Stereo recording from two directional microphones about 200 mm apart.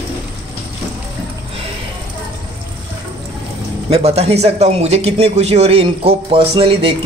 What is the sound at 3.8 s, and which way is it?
Speech, 30° right (ahead or behind).